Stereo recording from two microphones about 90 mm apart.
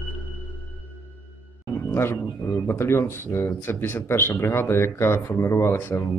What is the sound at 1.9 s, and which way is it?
Speech, 25° left (ahead or behind).